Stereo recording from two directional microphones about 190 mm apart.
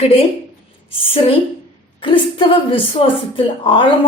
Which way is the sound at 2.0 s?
25° left (ahead or behind).